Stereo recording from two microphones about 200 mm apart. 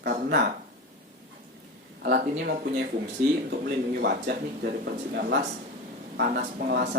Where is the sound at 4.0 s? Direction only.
55° right (ahead or behind).